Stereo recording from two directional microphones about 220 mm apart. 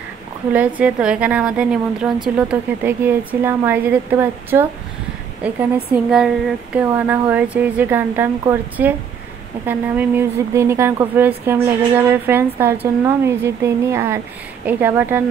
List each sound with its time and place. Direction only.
0.5 s a woman's voice: 5° right (ahead or behind)